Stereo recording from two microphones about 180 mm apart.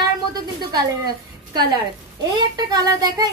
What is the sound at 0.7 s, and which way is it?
A woman's voice, 25° right (ahead or behind).